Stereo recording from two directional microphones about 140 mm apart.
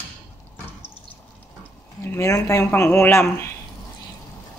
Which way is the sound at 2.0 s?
15° left (ahead or behind).